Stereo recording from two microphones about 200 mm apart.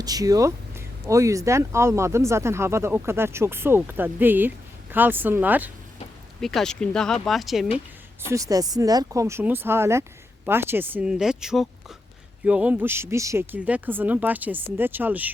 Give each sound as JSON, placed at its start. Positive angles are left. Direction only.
{"t": 0.0, "sound": "speech", "side_deg": -20}
{"t": 6.4, "sound": "speech", "side_deg": 0}
{"t": 8.3, "sound": "speech", "side_deg": -15}